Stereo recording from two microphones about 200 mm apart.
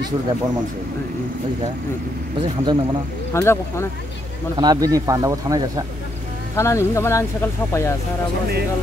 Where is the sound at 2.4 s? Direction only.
20° right (ahead or behind).